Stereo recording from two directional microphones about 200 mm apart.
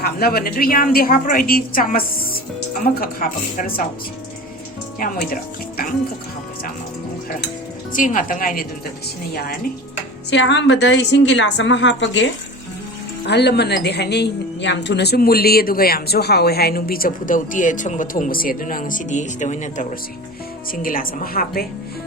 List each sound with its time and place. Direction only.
0.0 s a woman's voice: 50° left (ahead or behind)
4.9 s a woman's voice: 45° left (ahead or behind)
7.9 s a woman's voice: 40° left (ahead or behind)
10.2 s a woman's voice: 65° left (ahead or behind); by 21.7 s 50° left (ahead or behind)